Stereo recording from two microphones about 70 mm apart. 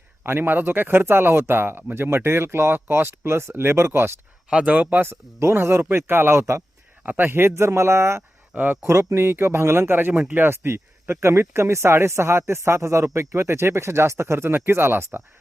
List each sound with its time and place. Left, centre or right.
0.2 s speech: right
4.4 s speech: centre
5.0 s speech: right
7.0 s speech: right
7.3 s speech: right
8.5 s speech: right
8.8 s speech: right